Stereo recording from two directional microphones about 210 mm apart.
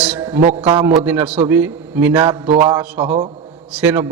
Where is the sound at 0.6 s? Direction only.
25° right (ahead or behind).